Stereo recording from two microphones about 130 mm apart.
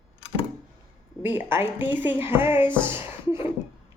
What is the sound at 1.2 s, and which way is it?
Speech, 15° right (ahead or behind).